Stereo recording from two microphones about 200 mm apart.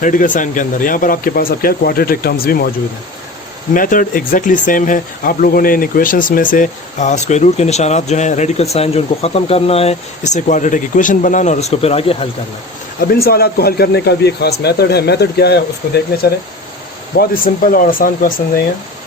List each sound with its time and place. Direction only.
0.0 s speech: 40° left (ahead or behind)
3.8 s speech: 45° left (ahead or behind)
13.1 s speech: 50° left (ahead or behind)
17.2 s speech: 45° left (ahead or behind)